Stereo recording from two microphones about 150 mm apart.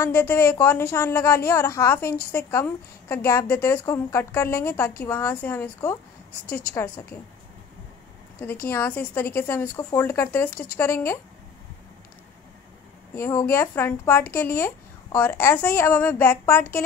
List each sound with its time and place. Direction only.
0.0 s a woman's voice: 15° left (ahead or behind)
8.6 s a woman's voice: 15° left (ahead or behind)
13.1 s a woman's voice: 20° left (ahead or behind)